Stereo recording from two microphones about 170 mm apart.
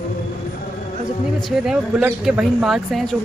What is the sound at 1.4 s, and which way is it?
Speech, 5° right (ahead or behind).